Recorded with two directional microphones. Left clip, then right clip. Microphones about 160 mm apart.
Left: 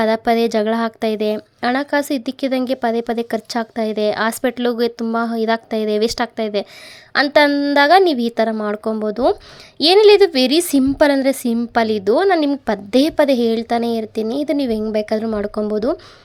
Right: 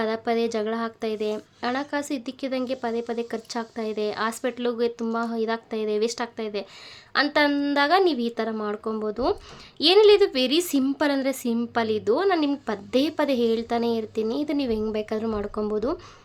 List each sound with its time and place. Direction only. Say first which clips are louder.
0.0 s speech: left 9 dB; 45° left (ahead or behind)
7.3 s speech: left 11 dB; 35° left (ahead or behind)